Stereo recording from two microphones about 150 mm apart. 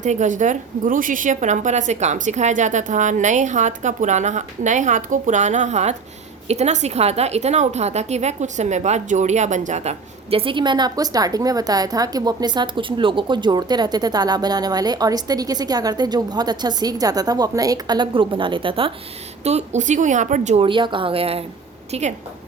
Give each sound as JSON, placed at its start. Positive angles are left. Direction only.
{"t": 0.0, "sound": "a woman's voice", "side_deg": -55}
{"t": 10.3, "sound": "a woman's voice", "side_deg": -35}
{"t": 19.5, "sound": "a woman's voice", "side_deg": -50}
{"t": 20.6, "sound": "speech", "side_deg": -35}